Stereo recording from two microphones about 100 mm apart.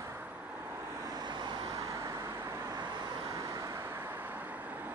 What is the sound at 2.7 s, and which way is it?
Vehicle, 45° right (ahead or behind).